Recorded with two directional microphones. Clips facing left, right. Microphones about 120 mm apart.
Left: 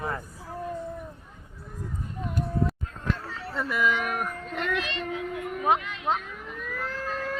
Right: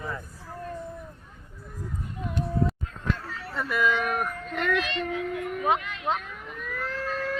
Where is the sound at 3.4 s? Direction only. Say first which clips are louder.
Even; 25° left (ahead or behind).